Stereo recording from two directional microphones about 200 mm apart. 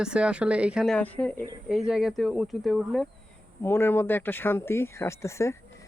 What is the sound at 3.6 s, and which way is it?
Speech, 10° left (ahead or behind).